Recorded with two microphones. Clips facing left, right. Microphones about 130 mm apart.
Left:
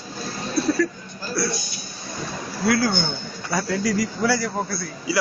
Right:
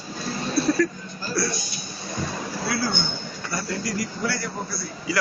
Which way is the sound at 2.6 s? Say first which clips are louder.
Left 7 dB; 65° left (ahead or behind).